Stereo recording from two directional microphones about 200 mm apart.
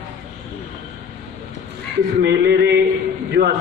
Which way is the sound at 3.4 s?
45° right (ahead or behind).